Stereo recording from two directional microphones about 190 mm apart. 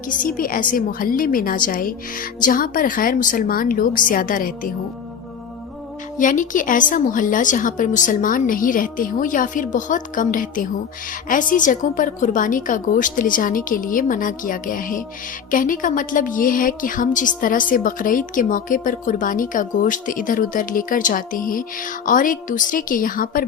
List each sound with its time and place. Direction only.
0.3 s a woman's voice: 50° left (ahead or behind)
6.1 s a woman's voice: 45° left (ahead or behind)